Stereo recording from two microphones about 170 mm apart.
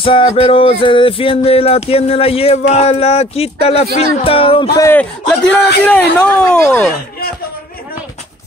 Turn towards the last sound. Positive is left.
turn(degrees=60)  # may be behind; listen again after turning